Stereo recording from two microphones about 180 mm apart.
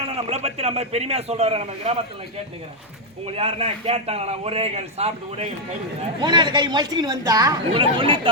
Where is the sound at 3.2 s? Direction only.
30° right (ahead or behind).